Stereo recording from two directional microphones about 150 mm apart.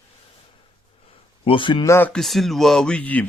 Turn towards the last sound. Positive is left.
turn(degrees=10)  # may be behind; listen again after turning